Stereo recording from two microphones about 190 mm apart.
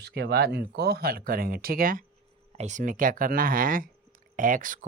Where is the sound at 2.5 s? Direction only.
35° right (ahead or behind).